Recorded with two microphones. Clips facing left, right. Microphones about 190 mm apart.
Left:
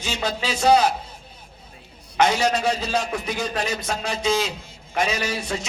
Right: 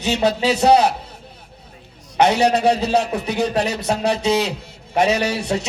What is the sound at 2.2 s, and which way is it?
A man's voice, 65° right (ahead or behind).